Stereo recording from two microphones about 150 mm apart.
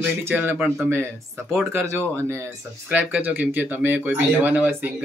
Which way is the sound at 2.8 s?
10° right (ahead or behind).